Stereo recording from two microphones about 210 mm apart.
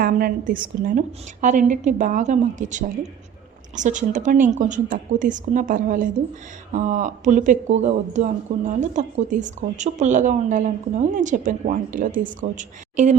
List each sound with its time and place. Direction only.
0.0 s speech: 45° right (ahead or behind)